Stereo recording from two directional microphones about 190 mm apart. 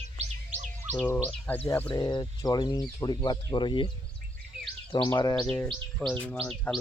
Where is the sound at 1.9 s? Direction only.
20° left (ahead or behind).